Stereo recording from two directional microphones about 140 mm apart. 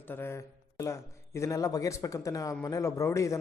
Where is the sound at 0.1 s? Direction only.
15° left (ahead or behind).